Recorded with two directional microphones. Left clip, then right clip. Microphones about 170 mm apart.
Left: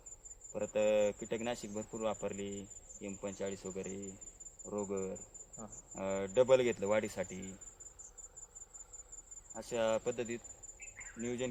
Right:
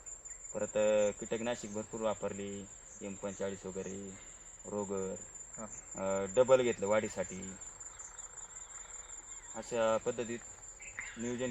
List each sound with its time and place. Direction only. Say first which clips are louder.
0.5 s speech: right 1 dB; 20° left (ahead or behind)
9.6 s speech: right 2 dB; 20° left (ahead or behind)